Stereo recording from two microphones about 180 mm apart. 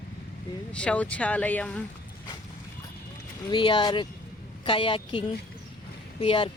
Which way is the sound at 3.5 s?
25° left (ahead or behind).